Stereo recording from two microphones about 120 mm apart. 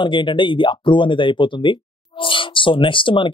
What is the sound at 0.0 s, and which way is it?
Speech, 40° left (ahead or behind).